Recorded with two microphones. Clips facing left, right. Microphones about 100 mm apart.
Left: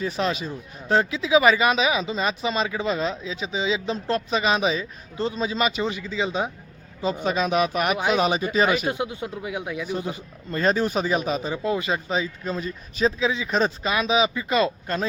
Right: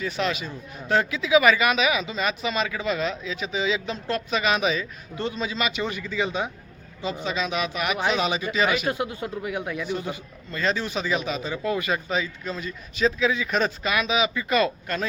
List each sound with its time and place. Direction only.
0.0 s speech: 30° left (ahead or behind)
5.8 s speech: 20° left (ahead or behind)
7.0 s speech: 45° left (ahead or behind)
7.9 s speech: 10° left (ahead or behind)
8.2 s a man's voice: 40° left (ahead or behind)
8.9 s speech: 20° left (ahead or behind)
10.1 s a man's voice: 40° left (ahead or behind)
11.5 s speech: 25° left (ahead or behind)